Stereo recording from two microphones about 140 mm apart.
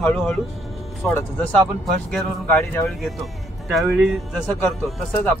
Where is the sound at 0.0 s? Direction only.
10° left (ahead or behind).